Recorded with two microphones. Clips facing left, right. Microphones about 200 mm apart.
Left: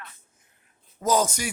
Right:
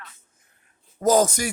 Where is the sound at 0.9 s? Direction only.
45° right (ahead or behind).